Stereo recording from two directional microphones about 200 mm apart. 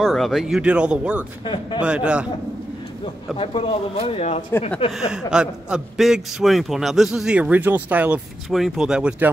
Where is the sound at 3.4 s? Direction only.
30° left (ahead or behind).